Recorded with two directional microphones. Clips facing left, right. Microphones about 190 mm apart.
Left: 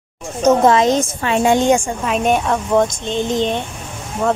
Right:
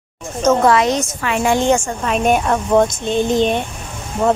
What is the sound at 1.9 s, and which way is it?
Speech, 5° left (ahead or behind).